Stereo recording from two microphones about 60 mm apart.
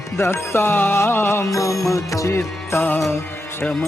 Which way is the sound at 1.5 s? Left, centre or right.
Left.